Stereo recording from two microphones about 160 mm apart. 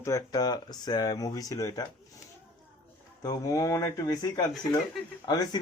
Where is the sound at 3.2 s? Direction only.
20° left (ahead or behind).